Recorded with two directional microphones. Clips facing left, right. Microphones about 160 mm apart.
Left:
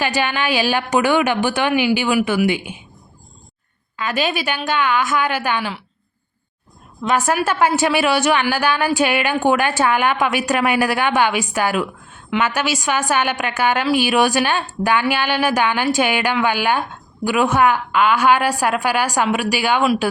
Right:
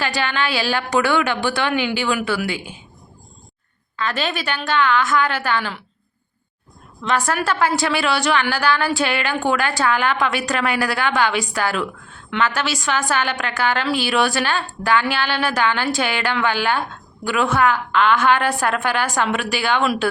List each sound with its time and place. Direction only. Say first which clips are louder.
0.0 s a woman's voice: left 2 dB; 15° left (ahead or behind)
3.9 s a woman's voice: left 2 dB; 15° left (ahead or behind)
7.4 s a woman's voice: left 3 dB; 20° left (ahead or behind)